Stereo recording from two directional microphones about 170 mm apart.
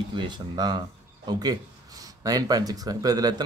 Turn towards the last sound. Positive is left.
turn(degrees=-20)  # may be behind; listen again after turning